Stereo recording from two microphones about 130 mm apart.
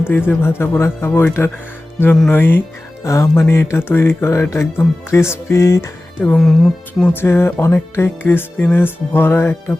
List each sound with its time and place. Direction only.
0.0 s speech: 15° left (ahead or behind)
6.3 s speech: 5° left (ahead or behind)
7.0 s speech: 15° left (ahead or behind)